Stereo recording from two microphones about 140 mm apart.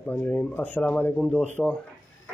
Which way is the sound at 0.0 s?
10° left (ahead or behind).